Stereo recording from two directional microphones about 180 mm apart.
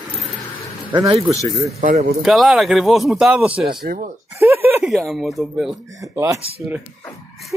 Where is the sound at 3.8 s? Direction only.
55° right (ahead or behind).